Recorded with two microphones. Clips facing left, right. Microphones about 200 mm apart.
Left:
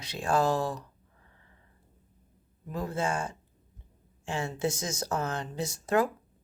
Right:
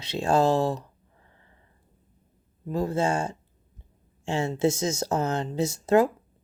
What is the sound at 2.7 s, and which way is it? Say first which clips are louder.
Speech: right 6 dB; 30° right (ahead or behind).